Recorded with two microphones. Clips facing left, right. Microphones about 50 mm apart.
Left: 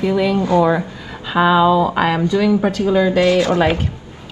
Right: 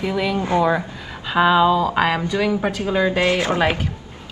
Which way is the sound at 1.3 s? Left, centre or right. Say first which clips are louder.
Left 2 dB; centre.